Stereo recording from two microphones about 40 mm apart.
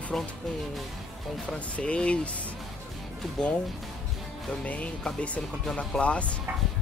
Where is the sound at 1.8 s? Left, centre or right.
Left.